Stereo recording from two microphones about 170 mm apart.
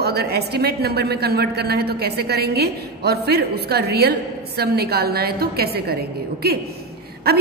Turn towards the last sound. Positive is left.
turn(degrees=-65)  # may be behind; listen again after turning